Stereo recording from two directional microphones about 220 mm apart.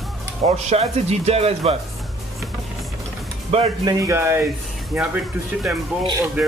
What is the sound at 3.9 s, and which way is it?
Speech, 15° right (ahead or behind).